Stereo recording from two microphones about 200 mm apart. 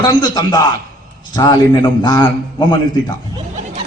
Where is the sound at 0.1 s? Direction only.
20° left (ahead or behind).